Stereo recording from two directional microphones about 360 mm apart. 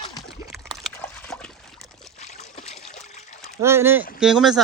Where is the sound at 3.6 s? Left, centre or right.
Centre.